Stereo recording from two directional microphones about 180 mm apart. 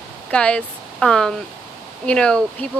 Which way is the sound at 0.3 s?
5° left (ahead or behind).